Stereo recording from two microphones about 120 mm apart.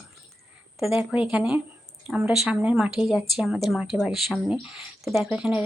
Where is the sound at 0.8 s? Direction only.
Centre (ahead or behind).